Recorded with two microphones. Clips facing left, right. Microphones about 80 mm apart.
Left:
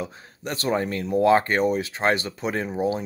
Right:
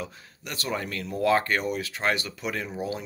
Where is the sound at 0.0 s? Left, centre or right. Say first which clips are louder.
Left 5 dB; left.